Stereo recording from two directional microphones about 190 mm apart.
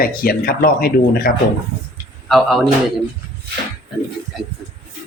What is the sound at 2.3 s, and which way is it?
Speech, centre (ahead or behind).